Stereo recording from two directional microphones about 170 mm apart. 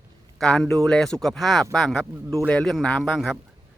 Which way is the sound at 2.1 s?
15° right (ahead or behind).